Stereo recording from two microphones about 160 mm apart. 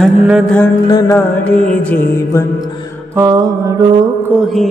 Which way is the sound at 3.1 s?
25° right (ahead or behind).